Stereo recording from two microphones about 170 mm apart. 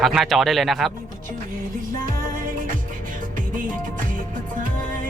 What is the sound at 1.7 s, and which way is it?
Music, 55° right (ahead or behind).